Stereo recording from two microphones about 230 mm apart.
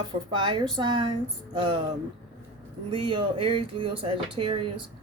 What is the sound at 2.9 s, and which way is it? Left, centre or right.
Speech, right.